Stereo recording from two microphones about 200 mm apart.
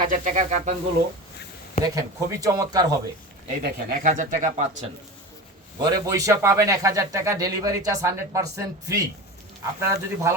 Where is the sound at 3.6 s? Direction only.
45° right (ahead or behind).